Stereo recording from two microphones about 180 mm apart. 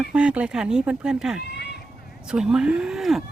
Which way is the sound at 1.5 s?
65° left (ahead or behind).